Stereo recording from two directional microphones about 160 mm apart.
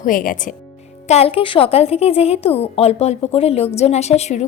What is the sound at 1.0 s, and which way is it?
A woman's voice, 40° left (ahead or behind).